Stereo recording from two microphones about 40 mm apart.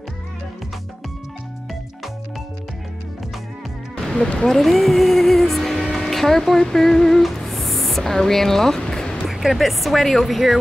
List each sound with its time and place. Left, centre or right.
4.0 s music: centre
4.5 s speech: centre
8.8 s music: centre
9.3 s speech: centre